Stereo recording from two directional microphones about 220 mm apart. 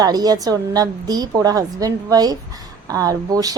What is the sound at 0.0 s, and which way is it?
A woman's voice, 20° right (ahead or behind).